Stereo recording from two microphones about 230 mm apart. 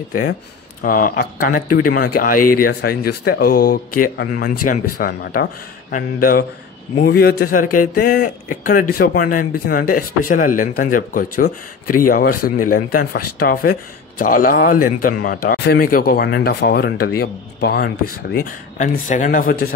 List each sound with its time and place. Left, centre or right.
0.1 s speech: left